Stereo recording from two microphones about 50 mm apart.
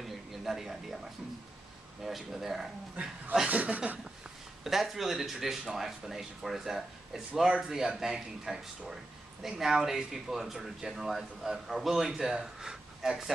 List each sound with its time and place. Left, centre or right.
0.0 s a sound: centre
2.0 s speech: centre
3.4 s speech: right
4.6 s speech: centre